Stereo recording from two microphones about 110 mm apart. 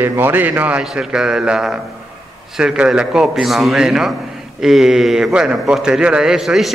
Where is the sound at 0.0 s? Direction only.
20° right (ahead or behind).